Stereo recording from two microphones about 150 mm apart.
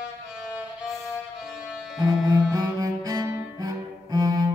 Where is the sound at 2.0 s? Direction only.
25° right (ahead or behind).